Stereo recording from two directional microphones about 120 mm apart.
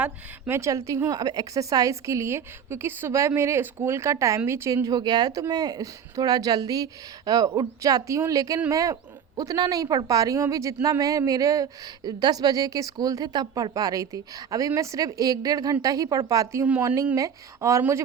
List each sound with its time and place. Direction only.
0.0 s a woman's voice: 20° right (ahead or behind)